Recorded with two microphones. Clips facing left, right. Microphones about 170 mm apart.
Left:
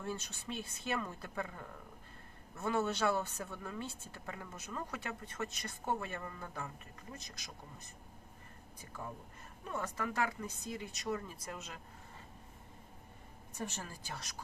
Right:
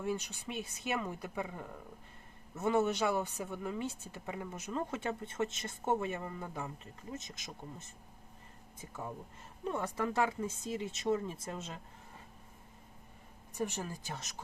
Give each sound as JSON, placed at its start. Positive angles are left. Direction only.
{"t": 0.0, "sound": "speech", "side_deg": -15}
{"t": 9.7, "sound": "speech", "side_deg": -20}
{"t": 13.6, "sound": "speech", "side_deg": -15}